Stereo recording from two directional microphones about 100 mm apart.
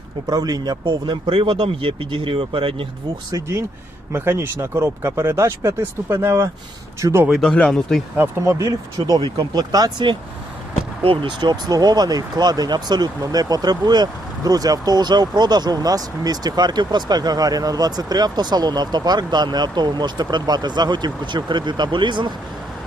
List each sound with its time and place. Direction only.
0.3 s speech: 40° right (ahead or behind); by 2.8 s 60° right (ahead or behind)
3.3 s speech: 30° right (ahead or behind)
7.3 s speech: centre (ahead or behind)
8.1 s speech: 20° right (ahead or behind)
8.5 s speech: 35° right (ahead or behind)
11.0 s speech: 65° right (ahead or behind)
11.3 s speech: 50° right (ahead or behind)